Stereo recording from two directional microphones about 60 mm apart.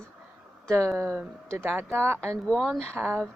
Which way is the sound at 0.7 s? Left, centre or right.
Right.